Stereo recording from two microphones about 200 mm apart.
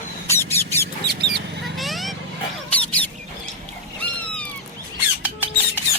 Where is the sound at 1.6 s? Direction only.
Centre (ahead or behind).